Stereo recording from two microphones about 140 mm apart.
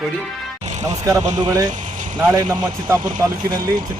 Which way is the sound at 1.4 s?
25° right (ahead or behind).